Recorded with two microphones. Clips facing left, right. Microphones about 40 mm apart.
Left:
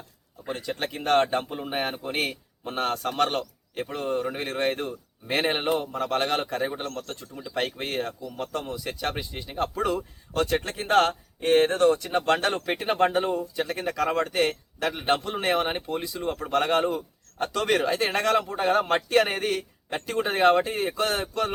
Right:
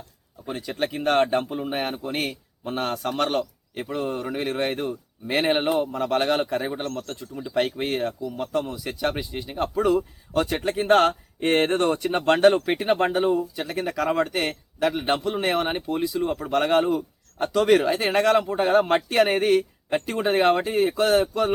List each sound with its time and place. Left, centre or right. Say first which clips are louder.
0.4 s speech: right 3 dB; centre
11.3 s speech: left 1 dB; right; by 21.5 s centre